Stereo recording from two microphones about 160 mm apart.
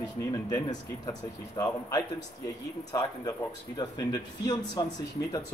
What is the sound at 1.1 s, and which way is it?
Speech, 20° left (ahead or behind).